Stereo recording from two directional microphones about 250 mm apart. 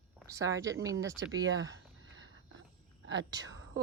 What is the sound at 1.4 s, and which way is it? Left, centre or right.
Speech, right.